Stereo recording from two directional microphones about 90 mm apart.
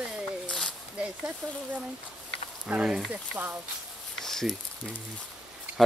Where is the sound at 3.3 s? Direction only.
25° right (ahead or behind).